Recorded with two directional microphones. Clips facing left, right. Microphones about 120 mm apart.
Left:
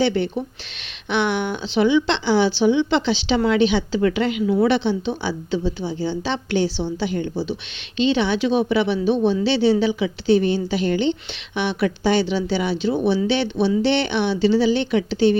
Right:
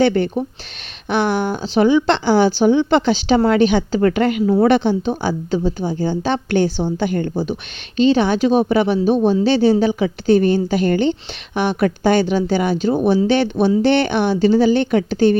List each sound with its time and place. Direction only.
0.0 s a woman's voice: 50° right (ahead or behind)